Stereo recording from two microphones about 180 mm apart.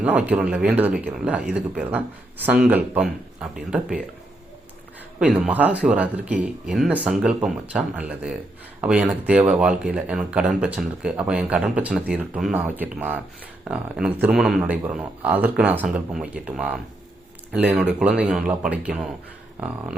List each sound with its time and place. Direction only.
0.0 s speech: 10° right (ahead or behind)
5.2 s speech: 10° right (ahead or behind)
19.5 s speech: 15° right (ahead or behind)